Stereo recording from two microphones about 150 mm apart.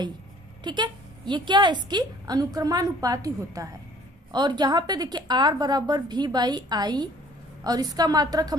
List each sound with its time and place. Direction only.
0.6 s a woman's voice: 30° right (ahead or behind)